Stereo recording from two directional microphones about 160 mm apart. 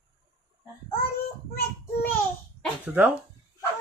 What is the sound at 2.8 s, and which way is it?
Speech, 10° right (ahead or behind).